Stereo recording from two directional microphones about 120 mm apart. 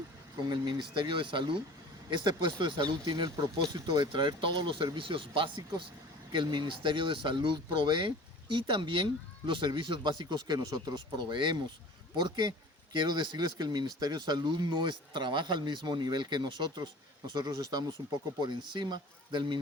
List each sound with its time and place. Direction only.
0.4 s speech: 40° right (ahead or behind)